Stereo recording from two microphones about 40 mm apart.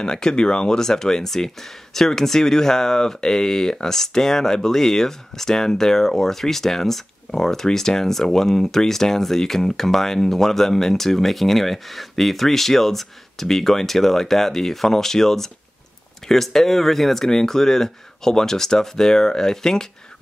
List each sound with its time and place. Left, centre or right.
0.0 s speech: centre